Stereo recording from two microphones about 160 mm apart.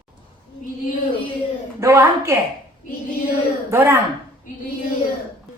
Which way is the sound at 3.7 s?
15° right (ahead or behind).